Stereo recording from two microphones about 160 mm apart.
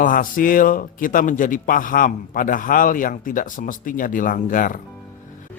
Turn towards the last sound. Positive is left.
turn(degrees=55)  # may be behind; listen again after turning